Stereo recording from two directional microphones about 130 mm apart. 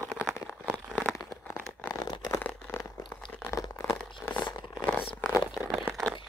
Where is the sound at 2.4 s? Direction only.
15° left (ahead or behind).